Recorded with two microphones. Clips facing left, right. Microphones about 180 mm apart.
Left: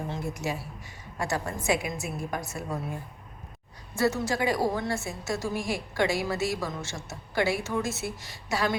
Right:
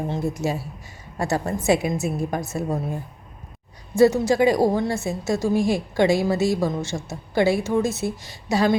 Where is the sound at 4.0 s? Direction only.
15° right (ahead or behind).